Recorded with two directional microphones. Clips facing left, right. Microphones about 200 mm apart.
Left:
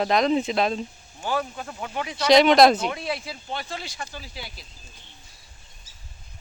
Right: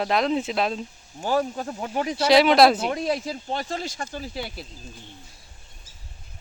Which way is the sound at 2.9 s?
40° right (ahead or behind).